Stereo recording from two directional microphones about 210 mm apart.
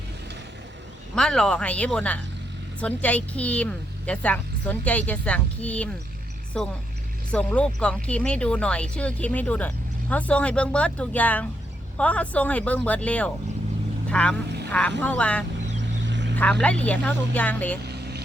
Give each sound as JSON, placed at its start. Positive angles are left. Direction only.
{"t": 1.1, "sound": "a woman's voice", "side_deg": 5}
{"t": 15.8, "sound": "vehicle", "side_deg": -60}
{"t": 16.3, "sound": "a woman's voice", "side_deg": 5}
{"t": 17.8, "sound": "vehicle", "side_deg": -50}